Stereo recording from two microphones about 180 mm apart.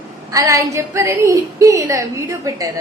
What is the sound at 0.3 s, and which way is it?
A woman's voice, 20° right (ahead or behind).